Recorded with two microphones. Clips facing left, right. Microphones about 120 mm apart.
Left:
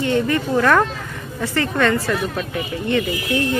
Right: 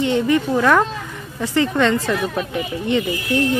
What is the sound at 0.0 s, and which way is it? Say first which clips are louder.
Speech: right 2 dB; 20° right (ahead or behind).